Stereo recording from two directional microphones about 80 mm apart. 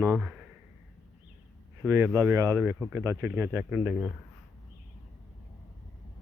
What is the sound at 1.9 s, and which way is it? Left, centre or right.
Speech, right.